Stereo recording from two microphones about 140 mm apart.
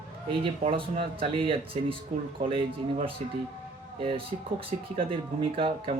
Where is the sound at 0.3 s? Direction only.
40° right (ahead or behind).